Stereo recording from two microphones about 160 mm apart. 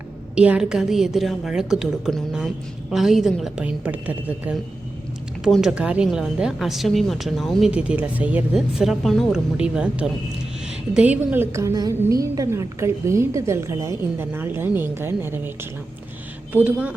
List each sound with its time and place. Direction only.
0.3 s a woman's voice: 10° right (ahead or behind)
16.5 s a woman's voice: 10° right (ahead or behind)